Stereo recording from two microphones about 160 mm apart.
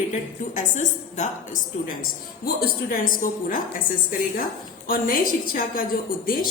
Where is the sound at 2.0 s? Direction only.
70° left (ahead or behind).